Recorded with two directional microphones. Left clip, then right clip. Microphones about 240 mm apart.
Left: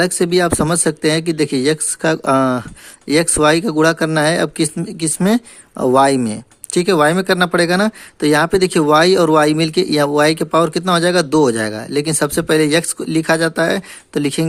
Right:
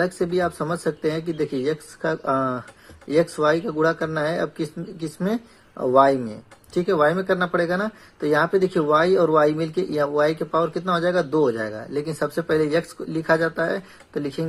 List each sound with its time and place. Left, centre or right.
0.0 s speech: left